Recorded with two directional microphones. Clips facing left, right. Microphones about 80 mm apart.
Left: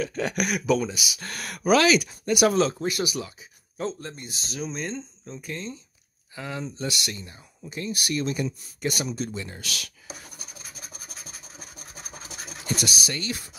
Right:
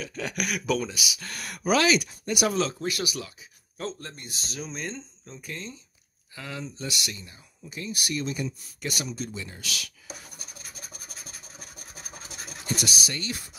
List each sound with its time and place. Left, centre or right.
0.0 s speech: left
0.6 s speech: centre
1.1 s speech: left
1.4 s speech: left
2.5 s speech: left
2.8 s speech: left
3.7 s speech: centre
4.6 s speech: centre
6.3 s speech: left
6.8 s speech: left
7.9 s speech: left
8.8 s speech: left
9.2 s speech: left
12.6 s speech: left